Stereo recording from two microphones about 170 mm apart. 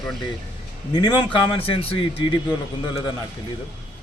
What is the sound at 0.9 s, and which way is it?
Speech, 25° left (ahead or behind).